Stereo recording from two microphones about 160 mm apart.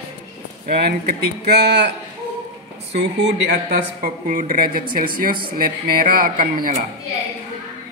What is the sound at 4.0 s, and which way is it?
Speech, 60° right (ahead or behind).